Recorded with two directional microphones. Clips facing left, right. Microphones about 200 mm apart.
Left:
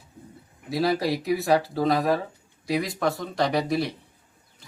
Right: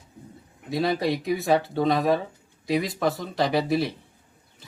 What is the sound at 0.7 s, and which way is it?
Speech, centre (ahead or behind).